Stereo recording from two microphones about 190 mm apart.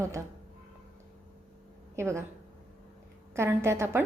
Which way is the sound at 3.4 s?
15° right (ahead or behind).